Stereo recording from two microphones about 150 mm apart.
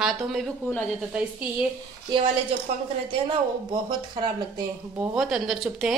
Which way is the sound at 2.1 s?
35° right (ahead or behind).